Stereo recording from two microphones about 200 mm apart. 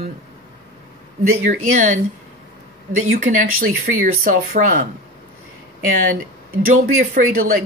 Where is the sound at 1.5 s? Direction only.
40° right (ahead or behind).